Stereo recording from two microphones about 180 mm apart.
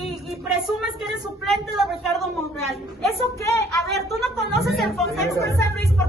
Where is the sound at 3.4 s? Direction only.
15° left (ahead or behind).